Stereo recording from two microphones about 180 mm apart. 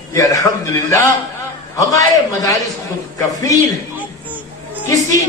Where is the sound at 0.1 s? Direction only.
20° left (ahead or behind).